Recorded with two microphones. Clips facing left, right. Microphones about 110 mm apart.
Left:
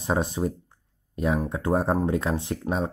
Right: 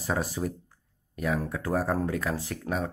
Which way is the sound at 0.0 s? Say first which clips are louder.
Left 4 dB; 25° left (ahead or behind).